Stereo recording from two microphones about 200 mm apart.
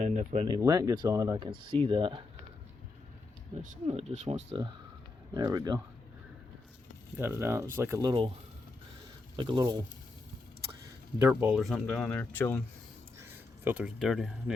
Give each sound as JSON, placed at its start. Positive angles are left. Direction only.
{"t": 0.0, "sound": "speech", "side_deg": -40}
{"t": 0.4, "sound": "speech", "side_deg": -20}
{"t": 3.5, "sound": "speech", "side_deg": -40}
{"t": 7.2, "sound": "speech", "side_deg": -10}
{"t": 9.3, "sound": "speech", "side_deg": -25}
{"t": 10.8, "sound": "speech", "side_deg": -10}
{"t": 13.1, "sound": "speech", "side_deg": -10}